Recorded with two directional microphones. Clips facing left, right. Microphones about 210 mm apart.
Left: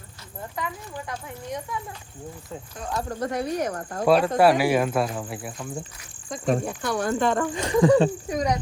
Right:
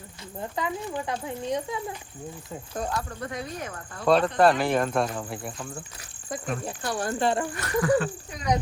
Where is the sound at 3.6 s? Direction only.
45° left (ahead or behind).